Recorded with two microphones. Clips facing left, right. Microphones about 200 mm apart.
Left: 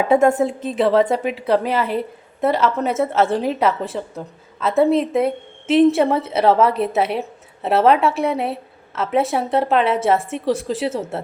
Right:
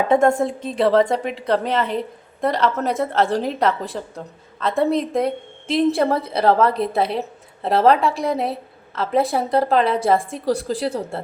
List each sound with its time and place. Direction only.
0.1 s a woman's voice: 5° left (ahead or behind)